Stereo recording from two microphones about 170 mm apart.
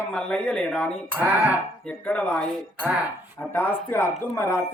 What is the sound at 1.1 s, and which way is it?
Speech, 10° right (ahead or behind).